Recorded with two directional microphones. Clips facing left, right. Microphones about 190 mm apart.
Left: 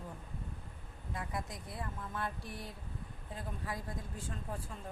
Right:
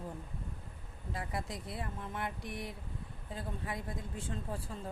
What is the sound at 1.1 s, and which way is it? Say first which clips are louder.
Speech: right 2 dB; 30° right (ahead or behind).